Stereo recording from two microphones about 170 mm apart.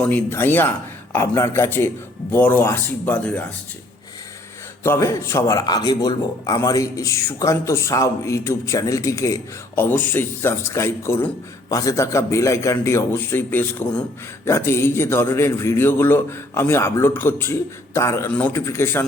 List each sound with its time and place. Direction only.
0.0 s a man's voice: 10° left (ahead or behind)
4.8 s a man's voice: 15° left (ahead or behind)